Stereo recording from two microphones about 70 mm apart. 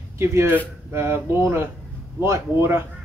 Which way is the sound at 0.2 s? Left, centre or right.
Right.